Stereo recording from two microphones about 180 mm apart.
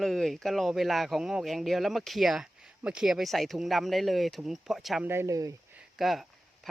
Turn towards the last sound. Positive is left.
turn(degrees=0)  # may be behind; listen again after turning